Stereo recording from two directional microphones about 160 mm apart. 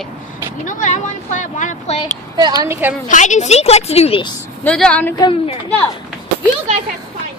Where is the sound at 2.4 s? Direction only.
25° right (ahead or behind).